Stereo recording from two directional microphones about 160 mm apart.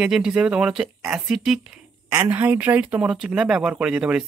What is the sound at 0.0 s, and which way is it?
Speech, 5° right (ahead or behind).